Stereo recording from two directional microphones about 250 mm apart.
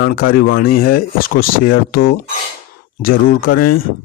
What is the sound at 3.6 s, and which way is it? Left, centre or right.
Speech, left.